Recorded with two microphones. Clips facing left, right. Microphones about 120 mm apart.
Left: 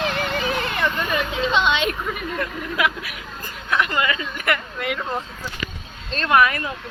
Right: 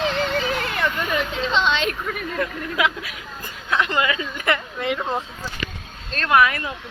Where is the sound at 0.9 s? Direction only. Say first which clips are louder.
Even; 5° right (ahead or behind).